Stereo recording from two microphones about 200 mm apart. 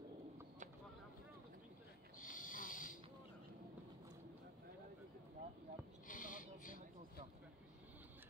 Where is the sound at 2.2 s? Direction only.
40° left (ahead or behind).